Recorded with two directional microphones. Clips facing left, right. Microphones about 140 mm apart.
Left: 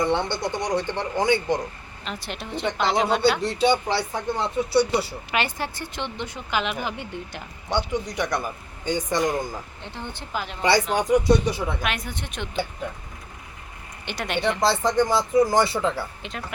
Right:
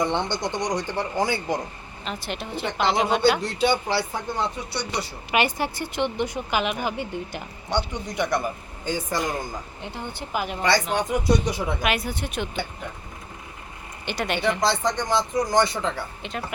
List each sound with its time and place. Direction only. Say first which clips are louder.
0.3 s a woman's voice: left 1 dB; 20° right (ahead or behind); by 5.0 s 5° left (ahead or behind)
5.3 s a woman's voice: right 4 dB; 10° right (ahead or behind)
7.7 s a woman's voice: left 2 dB; 15° right (ahead or behind)
8.1 s a woman's voice: right 2 dB; centre (ahead or behind)
10.6 s speech: left 2 dB; 10° left (ahead or behind)
10.8 s a woman's voice: left 3 dB; 5° right (ahead or behind)
14.0 s a woman's voice: right 1 dB; centre (ahead or behind)